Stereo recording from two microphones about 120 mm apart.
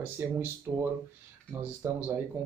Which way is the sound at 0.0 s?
15° right (ahead or behind).